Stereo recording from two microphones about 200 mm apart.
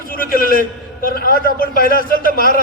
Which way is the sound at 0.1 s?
45° left (ahead or behind).